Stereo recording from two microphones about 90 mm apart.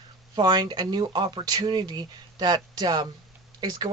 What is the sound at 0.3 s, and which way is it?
Speech, 50° right (ahead or behind).